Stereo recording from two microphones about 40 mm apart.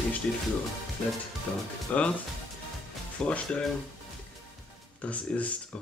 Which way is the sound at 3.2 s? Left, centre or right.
Left.